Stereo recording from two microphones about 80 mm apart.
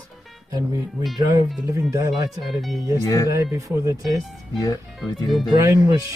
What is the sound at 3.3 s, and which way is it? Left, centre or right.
Speech, right.